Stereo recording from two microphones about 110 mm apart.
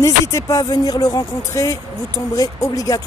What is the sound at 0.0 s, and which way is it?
Speech, 25° left (ahead or behind).